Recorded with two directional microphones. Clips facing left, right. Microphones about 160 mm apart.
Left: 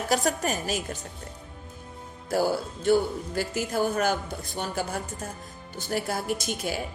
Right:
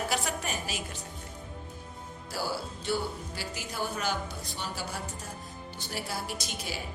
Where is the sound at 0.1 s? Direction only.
45° left (ahead or behind).